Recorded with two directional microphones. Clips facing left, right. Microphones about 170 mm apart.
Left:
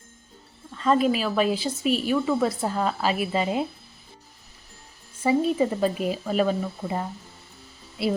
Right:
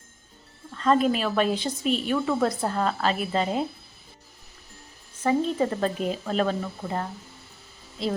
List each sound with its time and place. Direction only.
0.7 s a woman's voice: 5° left (ahead or behind)
5.2 s speech: 10° left (ahead or behind)